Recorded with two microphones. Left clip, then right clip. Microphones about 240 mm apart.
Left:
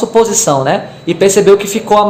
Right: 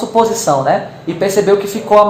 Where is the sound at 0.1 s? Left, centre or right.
Left.